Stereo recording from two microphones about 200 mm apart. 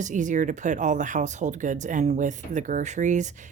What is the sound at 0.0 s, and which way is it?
Speech, 40° right (ahead or behind).